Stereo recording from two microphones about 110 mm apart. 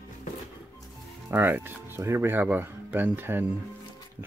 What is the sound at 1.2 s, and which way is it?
Speech, 20° right (ahead or behind).